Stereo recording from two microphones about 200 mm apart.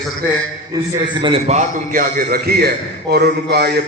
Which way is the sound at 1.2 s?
30° right (ahead or behind).